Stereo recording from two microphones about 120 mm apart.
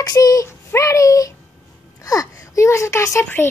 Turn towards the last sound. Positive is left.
turn(degrees=25)  # may be behind; listen again after turning